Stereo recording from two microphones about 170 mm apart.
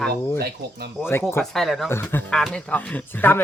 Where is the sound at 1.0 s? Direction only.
15° left (ahead or behind).